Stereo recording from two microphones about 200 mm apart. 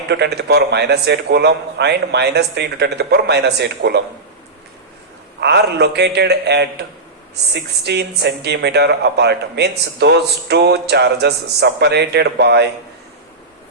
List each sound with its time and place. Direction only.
0.1 s speech: 55° right (ahead or behind)
5.4 s speech: 55° right (ahead or behind)